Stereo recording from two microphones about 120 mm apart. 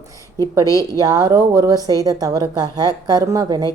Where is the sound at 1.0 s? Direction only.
30° right (ahead or behind).